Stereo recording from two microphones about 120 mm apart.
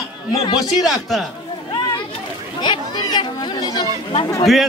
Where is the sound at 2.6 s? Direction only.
40° left (ahead or behind).